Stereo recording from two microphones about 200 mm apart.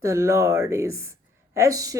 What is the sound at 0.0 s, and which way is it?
Speech, 15° right (ahead or behind).